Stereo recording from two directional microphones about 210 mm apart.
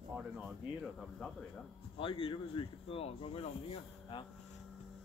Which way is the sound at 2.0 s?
25° left (ahead or behind).